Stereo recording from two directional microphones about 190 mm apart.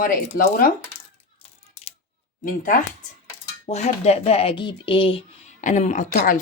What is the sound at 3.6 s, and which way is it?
Speech, 35° left (ahead or behind).